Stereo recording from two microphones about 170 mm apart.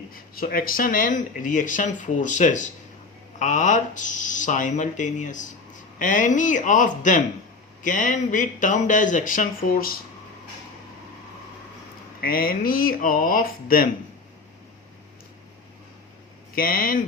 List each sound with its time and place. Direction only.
0.1 s speech: 55° left (ahead or behind)
12.2 s speech: 60° left (ahead or behind)
16.6 s speech: 55° left (ahead or behind)